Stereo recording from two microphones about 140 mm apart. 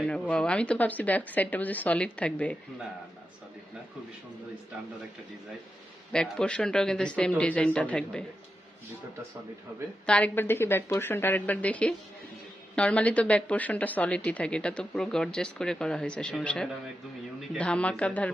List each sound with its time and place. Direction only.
0.0 s speech: 5° left (ahead or behind)
6.1 s speech: 5° left (ahead or behind)
10.1 s speech: 10° left (ahead or behind)